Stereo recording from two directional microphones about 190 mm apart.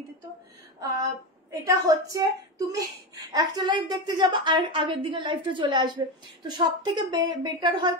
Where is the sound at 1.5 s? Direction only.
15° right (ahead or behind).